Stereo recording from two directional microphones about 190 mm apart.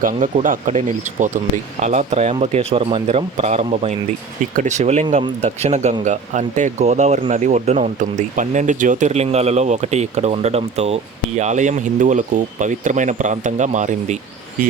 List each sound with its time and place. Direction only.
0.0 s speech: 45° right (ahead or behind)